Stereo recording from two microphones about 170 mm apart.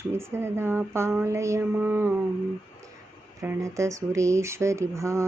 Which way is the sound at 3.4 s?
15° right (ahead or behind).